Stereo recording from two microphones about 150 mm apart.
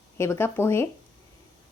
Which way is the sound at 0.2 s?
15° left (ahead or behind).